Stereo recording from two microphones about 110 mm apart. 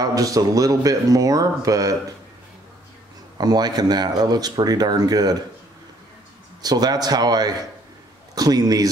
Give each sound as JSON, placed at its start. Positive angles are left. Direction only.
{"t": 0.0, "sound": "speech", "side_deg": -35}
{"t": 3.3, "sound": "speech", "side_deg": -35}
{"t": 6.6, "sound": "speech", "side_deg": -35}